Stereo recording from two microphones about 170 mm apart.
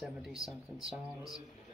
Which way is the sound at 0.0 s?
Centre (ahead or behind).